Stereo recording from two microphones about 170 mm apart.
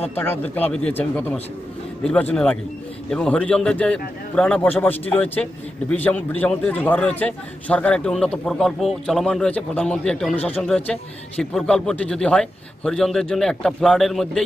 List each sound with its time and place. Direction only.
0.1 s a man's voice: 10° left (ahead or behind)